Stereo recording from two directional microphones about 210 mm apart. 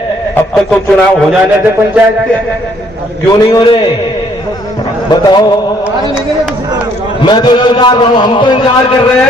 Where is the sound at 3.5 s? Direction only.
25° left (ahead or behind).